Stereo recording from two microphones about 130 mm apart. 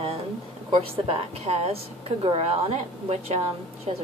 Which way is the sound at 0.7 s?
45° right (ahead or behind).